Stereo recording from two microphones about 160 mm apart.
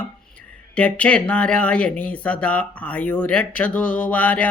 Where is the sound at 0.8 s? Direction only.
10° left (ahead or behind).